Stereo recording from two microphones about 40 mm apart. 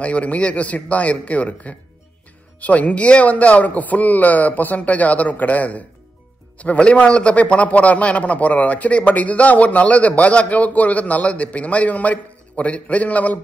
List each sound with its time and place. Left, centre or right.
0.0 s a man's voice: left